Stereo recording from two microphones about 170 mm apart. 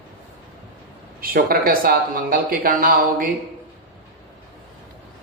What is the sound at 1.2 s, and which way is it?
Speech, 60° right (ahead or behind).